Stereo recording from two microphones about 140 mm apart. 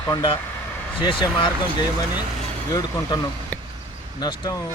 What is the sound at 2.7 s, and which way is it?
Speech, 25° left (ahead or behind).